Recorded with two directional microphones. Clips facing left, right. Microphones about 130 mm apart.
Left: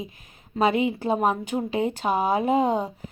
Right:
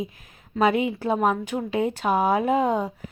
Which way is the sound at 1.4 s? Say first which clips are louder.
Even; centre (ahead or behind).